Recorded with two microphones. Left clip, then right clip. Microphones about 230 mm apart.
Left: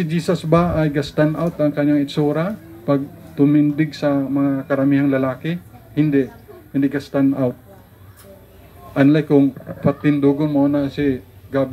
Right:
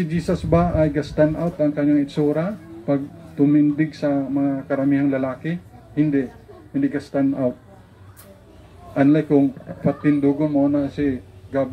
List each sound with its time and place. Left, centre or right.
0.0 s speech: left
8.9 s speech: left